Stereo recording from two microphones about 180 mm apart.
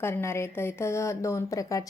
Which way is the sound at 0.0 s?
15° left (ahead or behind).